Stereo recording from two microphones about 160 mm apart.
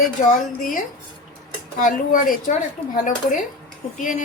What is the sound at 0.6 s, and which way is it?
A woman's voice, 55° left (ahead or behind).